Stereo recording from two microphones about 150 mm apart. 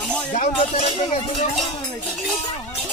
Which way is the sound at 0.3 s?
50° left (ahead or behind).